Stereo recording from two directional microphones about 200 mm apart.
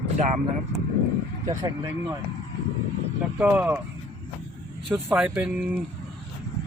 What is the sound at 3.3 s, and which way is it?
Speech, 5° right (ahead or behind).